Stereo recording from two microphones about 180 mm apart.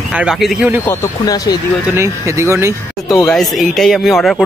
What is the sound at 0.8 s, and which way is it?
Speech, 15° left (ahead or behind).